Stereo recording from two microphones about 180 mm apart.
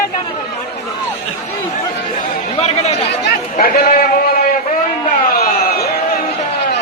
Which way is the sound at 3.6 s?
55° left (ahead or behind).